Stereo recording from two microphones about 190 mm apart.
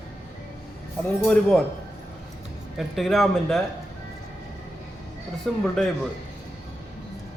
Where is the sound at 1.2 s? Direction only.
5° left (ahead or behind).